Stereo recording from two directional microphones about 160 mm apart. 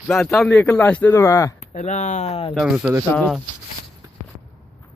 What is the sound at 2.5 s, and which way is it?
Speech, centre (ahead or behind).